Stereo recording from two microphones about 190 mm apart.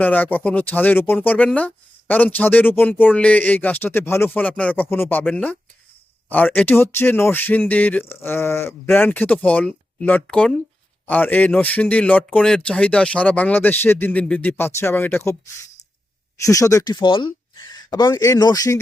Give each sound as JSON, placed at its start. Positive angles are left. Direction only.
{"t": 0.0, "sound": "speech", "side_deg": 10}
{"t": 16.4, "sound": "speech", "side_deg": 15}